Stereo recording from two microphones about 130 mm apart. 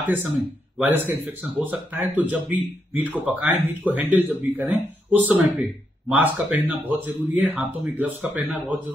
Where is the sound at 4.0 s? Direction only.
15° right (ahead or behind).